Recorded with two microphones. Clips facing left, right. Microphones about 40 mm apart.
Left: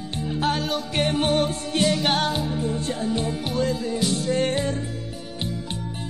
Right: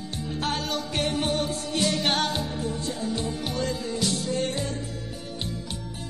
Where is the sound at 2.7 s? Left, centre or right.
Left.